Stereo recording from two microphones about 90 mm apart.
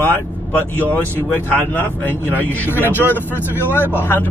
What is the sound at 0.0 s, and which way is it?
Speech, 20° left (ahead or behind).